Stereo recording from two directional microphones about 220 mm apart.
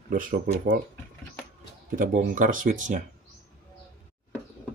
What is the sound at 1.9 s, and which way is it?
Speech, 40° right (ahead or behind).